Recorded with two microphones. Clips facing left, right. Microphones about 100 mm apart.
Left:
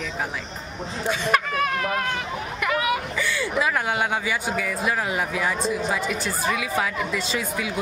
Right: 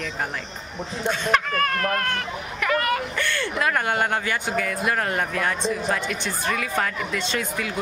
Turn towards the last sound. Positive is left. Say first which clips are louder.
# even
turn(degrees=5)  # may be behind; listen again after turning